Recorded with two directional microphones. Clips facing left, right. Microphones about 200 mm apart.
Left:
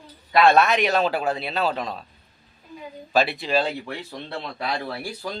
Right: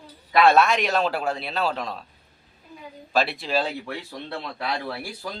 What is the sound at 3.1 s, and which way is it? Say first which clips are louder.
Speech: left 2 dB; centre (ahead or behind).